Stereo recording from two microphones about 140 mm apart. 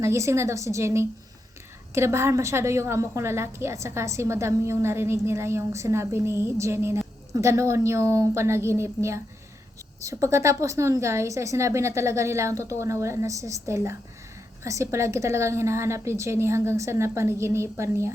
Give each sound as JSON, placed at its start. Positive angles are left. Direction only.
{"t": 0.0, "sound": "a woman's voice", "side_deg": -20}